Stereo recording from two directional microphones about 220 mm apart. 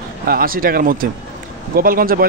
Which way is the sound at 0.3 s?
40° right (ahead or behind).